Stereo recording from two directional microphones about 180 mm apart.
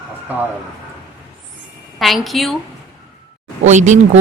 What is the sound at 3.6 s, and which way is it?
Speech, 40° right (ahead or behind).